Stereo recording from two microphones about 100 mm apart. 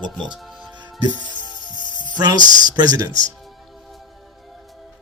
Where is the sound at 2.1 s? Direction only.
45° right (ahead or behind).